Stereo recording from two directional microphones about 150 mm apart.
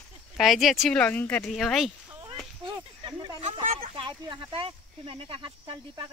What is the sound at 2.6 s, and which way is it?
Speech, 30° right (ahead or behind).